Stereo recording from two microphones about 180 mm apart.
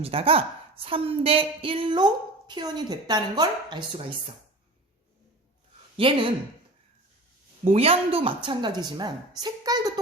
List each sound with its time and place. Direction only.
0.0 s a woman's voice: 30° right (ahead or behind)
6.0 s a woman's voice: 30° right (ahead or behind)
7.6 s a woman's voice: 35° right (ahead or behind)